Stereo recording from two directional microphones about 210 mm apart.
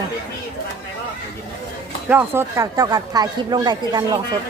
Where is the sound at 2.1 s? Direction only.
10° right (ahead or behind).